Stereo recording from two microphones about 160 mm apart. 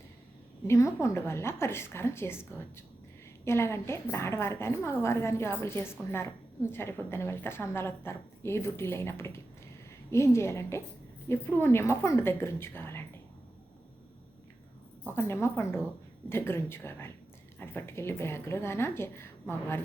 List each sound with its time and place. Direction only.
0.7 s a woman's voice: 20° left (ahead or behind)
15.1 s a woman's voice: 15° left (ahead or behind)